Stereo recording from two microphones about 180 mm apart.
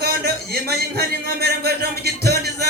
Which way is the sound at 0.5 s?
60° right (ahead or behind).